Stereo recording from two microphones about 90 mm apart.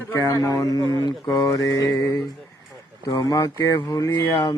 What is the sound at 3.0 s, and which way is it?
Mantra, 45° left (ahead or behind).